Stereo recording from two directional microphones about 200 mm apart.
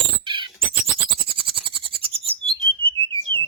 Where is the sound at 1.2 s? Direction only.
25° right (ahead or behind).